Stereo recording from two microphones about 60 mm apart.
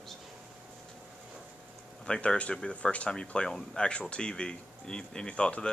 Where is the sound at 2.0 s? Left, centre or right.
Centre.